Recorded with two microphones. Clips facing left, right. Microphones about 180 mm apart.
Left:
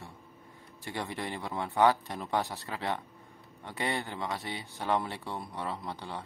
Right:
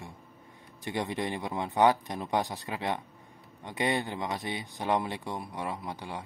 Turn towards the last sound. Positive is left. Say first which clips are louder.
# right 1 dB
turn(degrees=-10)  # may be behind; listen again after turning